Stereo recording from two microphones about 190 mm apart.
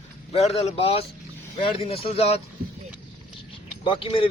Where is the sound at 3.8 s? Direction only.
25° left (ahead or behind).